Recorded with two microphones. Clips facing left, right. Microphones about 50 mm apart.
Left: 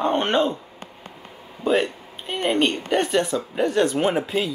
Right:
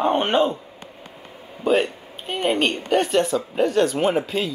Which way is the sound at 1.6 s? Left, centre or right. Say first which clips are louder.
Right 1 dB; centre.